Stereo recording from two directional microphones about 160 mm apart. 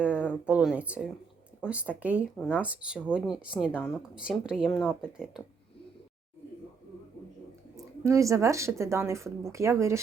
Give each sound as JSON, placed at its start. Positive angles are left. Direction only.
{"t": 0.1, "sound": "a sound", "side_deg": 10}
{"t": 0.4, "sound": "speech", "side_deg": -5}
{"t": 3.7, "sound": "a woman's voice", "side_deg": 10}
{"t": 4.3, "sound": "speech", "side_deg": -5}
{"t": 4.7, "sound": "a woman's voice", "side_deg": 15}
{"t": 5.0, "sound": "speech", "side_deg": -5}
{"t": 8.0, "sound": "speech", "side_deg": -20}